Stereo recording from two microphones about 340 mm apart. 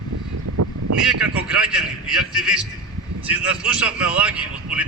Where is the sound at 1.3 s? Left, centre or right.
Centre.